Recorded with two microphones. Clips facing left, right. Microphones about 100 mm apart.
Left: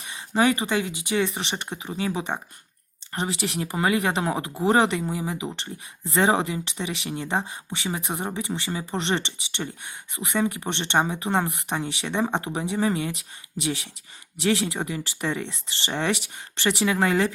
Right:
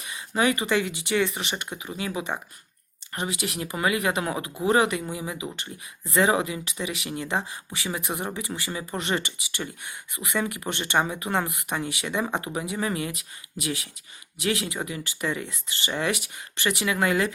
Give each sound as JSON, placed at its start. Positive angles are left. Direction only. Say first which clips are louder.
{"t": 0.3, "sound": "speech", "louder": "left 3 dB", "side_deg": 30}
{"t": 0.6, "sound": "speech", "louder": "right 1 dB", "side_deg": 20}